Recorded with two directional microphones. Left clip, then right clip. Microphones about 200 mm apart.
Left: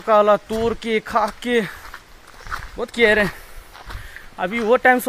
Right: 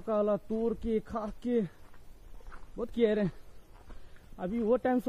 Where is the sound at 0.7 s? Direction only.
5° right (ahead or behind).